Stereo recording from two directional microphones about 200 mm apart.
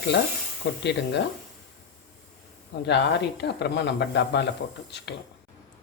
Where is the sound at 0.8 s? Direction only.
60° left (ahead or behind).